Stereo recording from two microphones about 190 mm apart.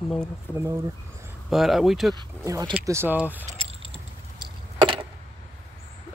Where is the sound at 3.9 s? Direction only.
25° right (ahead or behind).